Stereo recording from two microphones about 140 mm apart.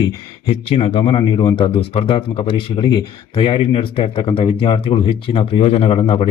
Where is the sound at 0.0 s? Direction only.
40° left (ahead or behind).